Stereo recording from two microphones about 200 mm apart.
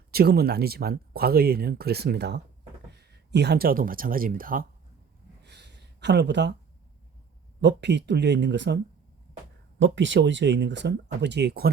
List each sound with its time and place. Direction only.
0.1 s speech: 50° right (ahead or behind)
5.4 s a sound: 55° right (ahead or behind)
7.6 s speech: 60° right (ahead or behind)